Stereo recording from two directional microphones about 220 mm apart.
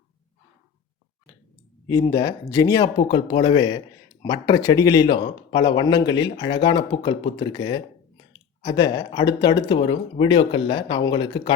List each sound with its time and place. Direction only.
1.9 s speech: 15° left (ahead or behind)